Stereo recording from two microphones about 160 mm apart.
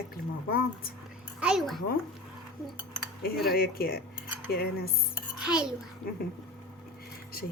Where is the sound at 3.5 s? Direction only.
70° left (ahead or behind).